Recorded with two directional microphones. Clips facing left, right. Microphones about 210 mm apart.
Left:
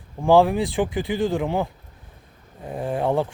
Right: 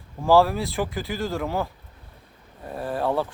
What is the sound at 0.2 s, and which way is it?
Speech, 15° left (ahead or behind).